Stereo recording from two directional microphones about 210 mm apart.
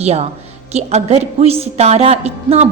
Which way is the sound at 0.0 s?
30° right (ahead or behind).